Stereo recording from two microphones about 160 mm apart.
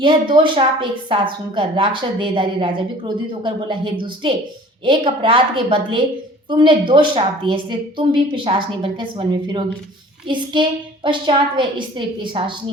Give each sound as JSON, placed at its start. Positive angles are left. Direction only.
{"t": 0.0, "sound": "a woman's voice", "side_deg": -30}